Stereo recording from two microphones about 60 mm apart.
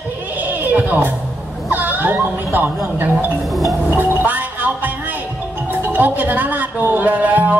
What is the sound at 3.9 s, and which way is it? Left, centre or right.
Music, right.